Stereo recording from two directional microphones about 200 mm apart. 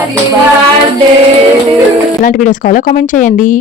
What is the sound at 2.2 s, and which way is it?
Speech, 40° left (ahead or behind).